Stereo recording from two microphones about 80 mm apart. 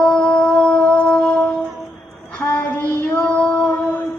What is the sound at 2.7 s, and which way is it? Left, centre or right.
Child singing, left.